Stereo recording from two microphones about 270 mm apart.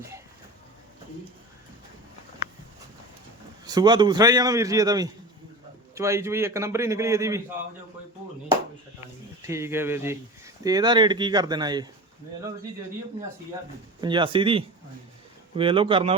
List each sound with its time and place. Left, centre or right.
3.7 s speech: centre
9.4 s speech: centre
14.0 s a man's voice: centre